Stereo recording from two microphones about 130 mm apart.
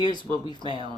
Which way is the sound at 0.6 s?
40° right (ahead or behind).